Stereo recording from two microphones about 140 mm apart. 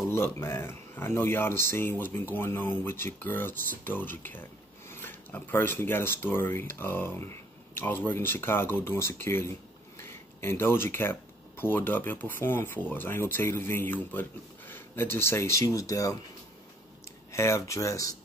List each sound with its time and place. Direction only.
0.1 s speech: 20° left (ahead or behind)
17.3 s speech: 20° left (ahead or behind)